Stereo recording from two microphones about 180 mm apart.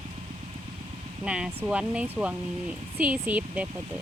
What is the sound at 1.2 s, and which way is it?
Speech, 5° right (ahead or behind).